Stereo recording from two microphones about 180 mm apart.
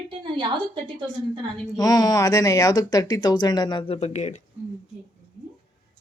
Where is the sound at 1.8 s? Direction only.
20° left (ahead or behind); by 4.4 s 40° left (ahead or behind).